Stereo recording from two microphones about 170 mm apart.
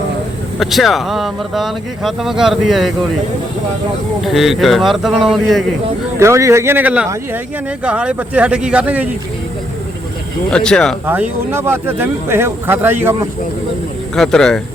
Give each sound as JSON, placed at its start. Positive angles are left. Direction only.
{"t": 0.6, "sound": "speech", "side_deg": 0}
{"t": 4.2, "sound": "speech", "side_deg": 0}
{"t": 6.1, "sound": "speech", "side_deg": -15}
{"t": 10.5, "sound": "speech", "side_deg": 5}
{"t": 11.0, "sound": "speech", "side_deg": -10}
{"t": 14.2, "sound": "speech", "side_deg": 5}